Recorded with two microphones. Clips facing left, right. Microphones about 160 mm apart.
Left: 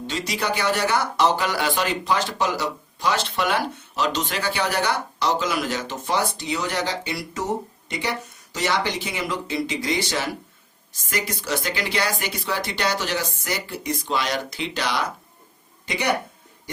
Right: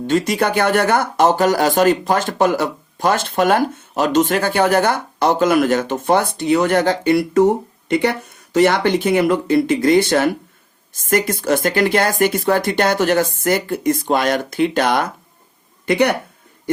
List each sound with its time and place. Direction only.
0.1 s speech: 50° right (ahead or behind)